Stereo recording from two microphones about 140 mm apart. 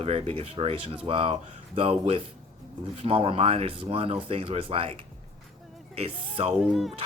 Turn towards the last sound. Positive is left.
turn(degrees=0)  # may be behind; listen again after turning